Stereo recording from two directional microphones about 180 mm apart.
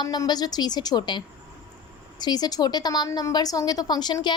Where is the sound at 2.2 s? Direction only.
20° left (ahead or behind).